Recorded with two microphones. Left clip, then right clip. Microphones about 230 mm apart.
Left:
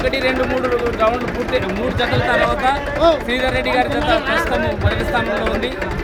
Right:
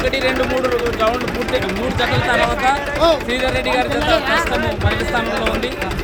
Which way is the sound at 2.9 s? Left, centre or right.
Right.